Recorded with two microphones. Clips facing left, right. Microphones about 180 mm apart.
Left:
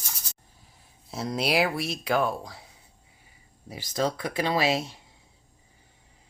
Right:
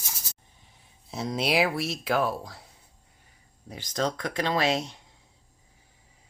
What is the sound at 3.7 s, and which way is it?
Speech, 5° left (ahead or behind).